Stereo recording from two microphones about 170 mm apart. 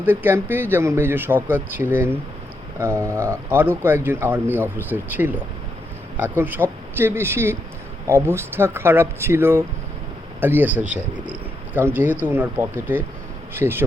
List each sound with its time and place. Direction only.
0.0 s speech: 10° right (ahead or behind)